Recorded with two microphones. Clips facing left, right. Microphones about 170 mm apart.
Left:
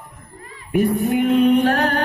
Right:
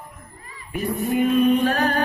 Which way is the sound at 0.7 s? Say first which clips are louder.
Left 5 dB; 65° left (ahead or behind).